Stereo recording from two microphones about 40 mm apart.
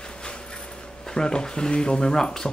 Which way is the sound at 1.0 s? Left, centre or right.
Centre.